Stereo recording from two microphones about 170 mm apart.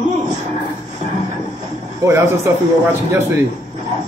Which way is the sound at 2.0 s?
15° right (ahead or behind).